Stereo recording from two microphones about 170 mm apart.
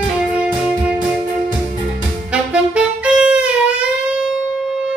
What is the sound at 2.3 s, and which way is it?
Saxophone, 5° right (ahead or behind).